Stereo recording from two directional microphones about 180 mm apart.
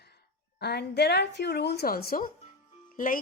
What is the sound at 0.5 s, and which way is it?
A woman's voice, 65° left (ahead or behind).